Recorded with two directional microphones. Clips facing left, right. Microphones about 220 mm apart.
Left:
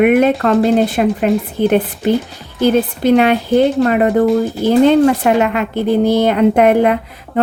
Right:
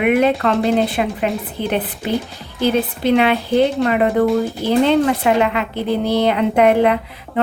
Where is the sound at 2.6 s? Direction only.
45° left (ahead or behind).